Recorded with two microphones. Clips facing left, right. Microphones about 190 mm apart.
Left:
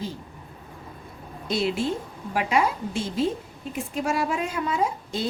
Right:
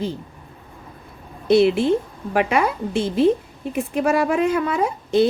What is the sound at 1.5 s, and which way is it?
A woman's voice, 65° right (ahead or behind).